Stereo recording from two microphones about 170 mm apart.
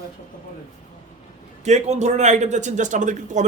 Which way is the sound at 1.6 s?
40° right (ahead or behind).